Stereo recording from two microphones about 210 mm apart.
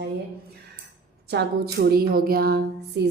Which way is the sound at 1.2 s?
50° right (ahead or behind).